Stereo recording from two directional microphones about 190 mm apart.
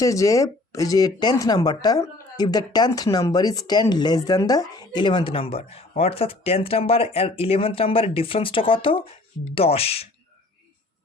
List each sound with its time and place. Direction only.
0.0 s speech: 15° left (ahead or behind)